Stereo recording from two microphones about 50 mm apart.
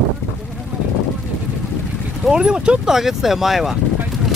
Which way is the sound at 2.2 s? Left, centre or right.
Centre.